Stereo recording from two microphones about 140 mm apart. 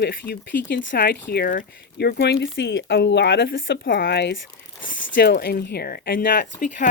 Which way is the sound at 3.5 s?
90° left.